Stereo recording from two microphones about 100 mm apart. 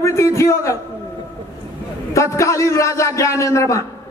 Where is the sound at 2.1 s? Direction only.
30° left (ahead or behind).